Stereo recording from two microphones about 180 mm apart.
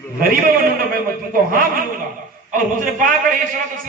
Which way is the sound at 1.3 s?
50° right (ahead or behind).